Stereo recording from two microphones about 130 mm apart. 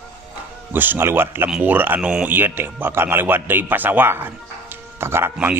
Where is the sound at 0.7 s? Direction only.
15° right (ahead or behind).